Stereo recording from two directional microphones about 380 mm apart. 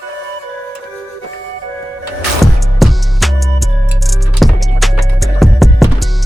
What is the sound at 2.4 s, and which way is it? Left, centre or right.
Music, centre.